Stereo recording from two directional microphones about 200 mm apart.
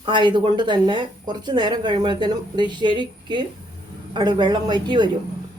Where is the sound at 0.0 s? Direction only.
25° right (ahead or behind).